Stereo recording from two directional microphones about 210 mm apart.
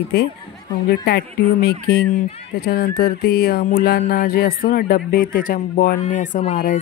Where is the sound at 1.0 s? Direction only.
50° left (ahead or behind).